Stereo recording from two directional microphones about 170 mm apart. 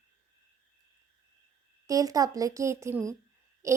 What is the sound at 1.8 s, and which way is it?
A woman's voice, 20° right (ahead or behind).